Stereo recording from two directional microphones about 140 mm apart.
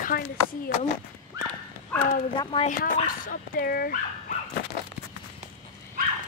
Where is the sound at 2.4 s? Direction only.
35° left (ahead or behind).